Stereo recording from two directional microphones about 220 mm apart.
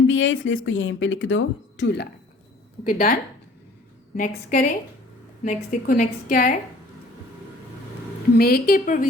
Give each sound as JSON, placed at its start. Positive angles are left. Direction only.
{"t": 0.1, "sound": "speech", "side_deg": 60}
{"t": 2.8, "sound": "a woman's voice", "side_deg": 40}
{"t": 4.2, "sound": "a woman's voice", "side_deg": 35}
{"t": 8.4, "sound": "a woman's voice", "side_deg": 45}